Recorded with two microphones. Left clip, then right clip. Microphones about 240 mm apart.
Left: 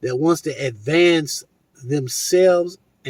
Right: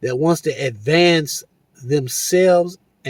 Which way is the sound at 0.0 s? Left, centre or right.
Right.